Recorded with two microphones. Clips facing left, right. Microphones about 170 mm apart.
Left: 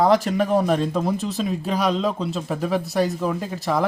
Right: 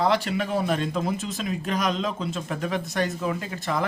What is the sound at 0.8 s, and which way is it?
Speech, 35° left (ahead or behind).